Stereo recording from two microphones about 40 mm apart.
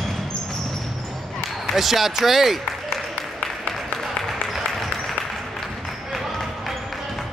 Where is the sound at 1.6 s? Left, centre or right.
Centre.